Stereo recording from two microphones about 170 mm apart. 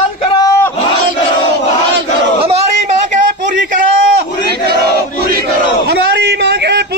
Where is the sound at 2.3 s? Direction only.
35° right (ahead or behind).